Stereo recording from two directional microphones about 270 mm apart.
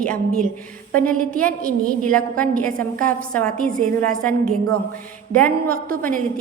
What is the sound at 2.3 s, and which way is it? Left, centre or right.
Speech, right.